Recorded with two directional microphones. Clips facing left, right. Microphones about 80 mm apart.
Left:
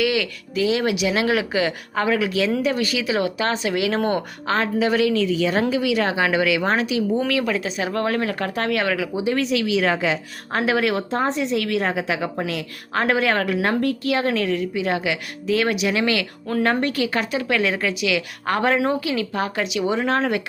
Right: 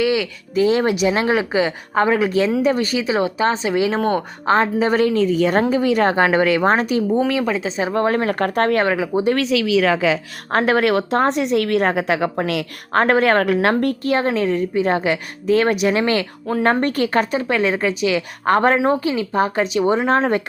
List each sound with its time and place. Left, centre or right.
0.0 s a sound: right
0.5 s speech: right
3.9 s speech: centre
4.4 s speech: right
7.3 s speech: right
8.4 s speech: right
9.1 s a woman's voice: right
10.5 s a woman's voice: right
11.6 s a woman's voice: right
13.0 s a woman's voice: right
14.3 s speech: right
17.5 s speech: right